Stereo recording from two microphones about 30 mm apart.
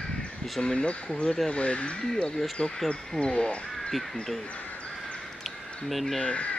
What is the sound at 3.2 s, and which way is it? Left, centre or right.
Speech, left.